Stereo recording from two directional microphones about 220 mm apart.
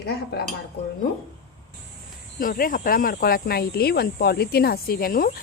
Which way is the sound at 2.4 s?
40° left (ahead or behind).